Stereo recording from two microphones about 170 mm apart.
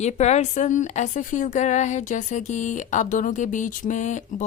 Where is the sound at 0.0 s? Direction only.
40° left (ahead or behind).